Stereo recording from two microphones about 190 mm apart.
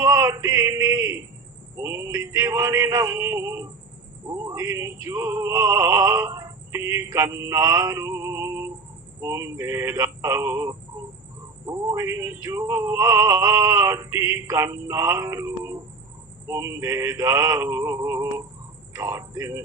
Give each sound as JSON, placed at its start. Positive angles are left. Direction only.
{"t": 0.0, "sound": "a sound", "side_deg": -20}
{"t": 1.7, "sound": "male singing", "side_deg": -15}
{"t": 18.9, "sound": "speech", "side_deg": -20}